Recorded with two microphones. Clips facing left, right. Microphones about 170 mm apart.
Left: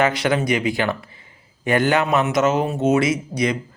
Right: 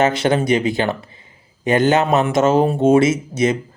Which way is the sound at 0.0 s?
25° right (ahead or behind).